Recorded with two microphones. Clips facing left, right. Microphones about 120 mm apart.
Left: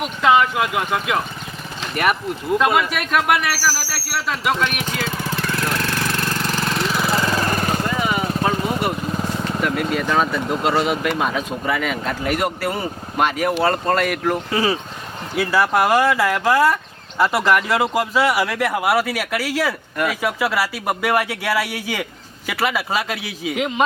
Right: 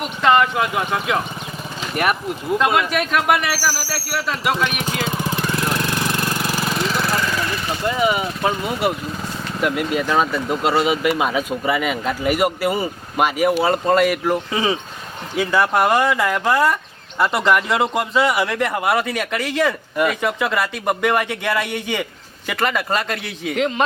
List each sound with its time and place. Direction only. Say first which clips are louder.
0.0 s speech: even; centre (ahead or behind)
3.5 s speech: even; 15° right (ahead or behind)
4.1 s speech: even; centre (ahead or behind)
4.9 s jackhammer: right 2 dB; 15° right (ahead or behind); by 7.0 s centre (ahead or behind)
7.2 s lawn mower: left 3 dB; 35° left (ahead or behind)
7.9 s vehicle: right 2 dB; 10° right (ahead or behind)
9.6 s speech: right 3 dB; 5° right (ahead or behind)